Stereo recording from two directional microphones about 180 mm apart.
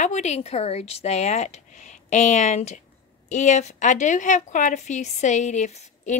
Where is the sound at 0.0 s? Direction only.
40° left (ahead or behind).